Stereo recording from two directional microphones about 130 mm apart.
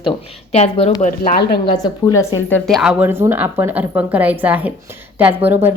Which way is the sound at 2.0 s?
25° left (ahead or behind).